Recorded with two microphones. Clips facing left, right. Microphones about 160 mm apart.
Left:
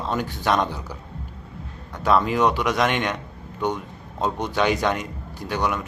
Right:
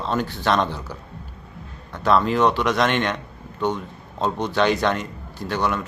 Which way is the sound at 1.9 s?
10° left (ahead or behind).